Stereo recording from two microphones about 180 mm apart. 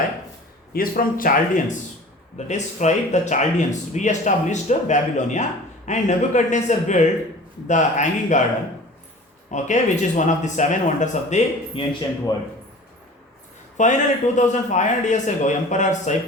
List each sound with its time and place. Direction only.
0.7 s speech: 50° left (ahead or behind)
9.5 s speech: 40° left (ahead or behind)
11.8 s speech: 25° left (ahead or behind)
13.7 s speech: 40° left (ahead or behind)